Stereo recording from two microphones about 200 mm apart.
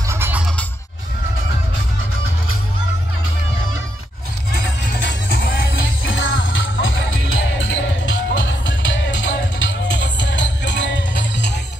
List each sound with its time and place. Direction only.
0.1 s music: 10° right (ahead or behind)
4.5 s music: 50° left (ahead or behind)
6.0 s music: 70° left (ahead or behind)